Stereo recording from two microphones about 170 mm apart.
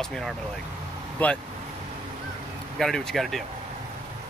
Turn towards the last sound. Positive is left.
turn(degrees=0)  # may be behind; listen again after turning